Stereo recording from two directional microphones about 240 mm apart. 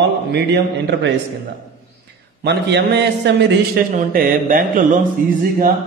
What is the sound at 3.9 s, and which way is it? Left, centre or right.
Mantra, right.